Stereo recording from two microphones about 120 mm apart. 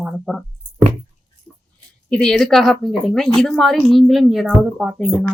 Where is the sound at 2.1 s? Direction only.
5° left (ahead or behind).